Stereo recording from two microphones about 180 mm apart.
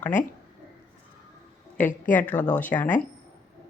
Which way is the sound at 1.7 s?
10° left (ahead or behind).